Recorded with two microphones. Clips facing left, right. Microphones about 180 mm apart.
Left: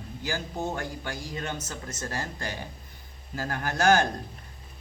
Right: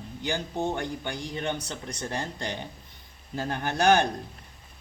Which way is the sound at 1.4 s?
20° right (ahead or behind).